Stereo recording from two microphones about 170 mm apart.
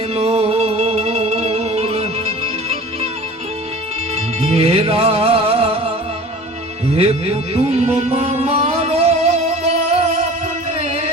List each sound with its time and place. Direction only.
0.1 s music: 35° right (ahead or behind)
4.4 s music: 35° right (ahead or behind)
6.9 s music: 35° right (ahead or behind)